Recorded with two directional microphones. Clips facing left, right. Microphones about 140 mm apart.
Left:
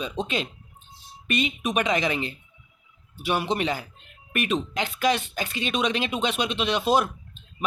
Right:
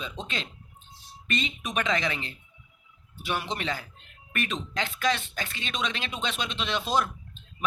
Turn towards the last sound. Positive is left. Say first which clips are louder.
# left 4 dB
turn(degrees=15)  # may be behind; listen again after turning